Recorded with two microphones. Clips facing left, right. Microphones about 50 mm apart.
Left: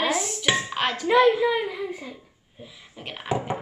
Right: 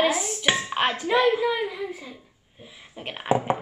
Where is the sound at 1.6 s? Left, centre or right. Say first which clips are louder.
Even; centre.